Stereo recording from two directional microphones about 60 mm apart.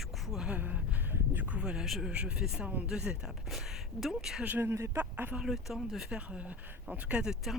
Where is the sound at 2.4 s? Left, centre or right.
Centre.